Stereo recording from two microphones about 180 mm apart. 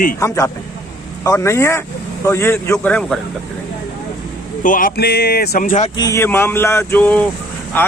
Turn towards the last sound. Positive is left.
turn(degrees=10)  # may be behind; listen again after turning